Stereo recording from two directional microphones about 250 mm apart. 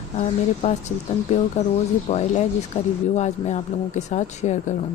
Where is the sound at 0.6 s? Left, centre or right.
Left.